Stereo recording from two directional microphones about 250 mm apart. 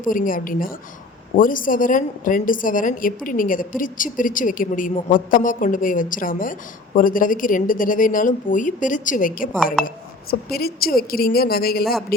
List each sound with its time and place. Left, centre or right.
0.0 s a woman's voice: left
10.5 s a woman's voice: left